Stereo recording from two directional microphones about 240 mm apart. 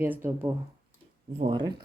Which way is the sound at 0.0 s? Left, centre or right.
Centre.